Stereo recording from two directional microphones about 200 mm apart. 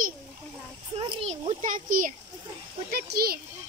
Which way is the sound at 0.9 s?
30° right (ahead or behind).